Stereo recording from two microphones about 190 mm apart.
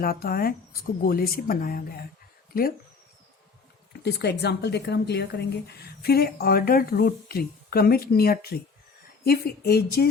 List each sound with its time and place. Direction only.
0.0 s speech: 50° left (ahead or behind)
4.0 s speech: 60° left (ahead or behind)